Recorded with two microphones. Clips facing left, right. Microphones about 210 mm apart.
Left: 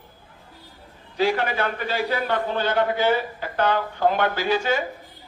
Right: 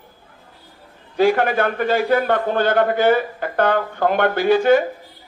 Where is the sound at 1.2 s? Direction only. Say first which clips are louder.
Right 6 dB; 50° right (ahead or behind).